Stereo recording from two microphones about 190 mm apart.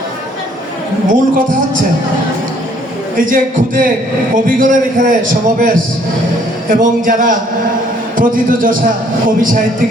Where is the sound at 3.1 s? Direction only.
45° right (ahead or behind).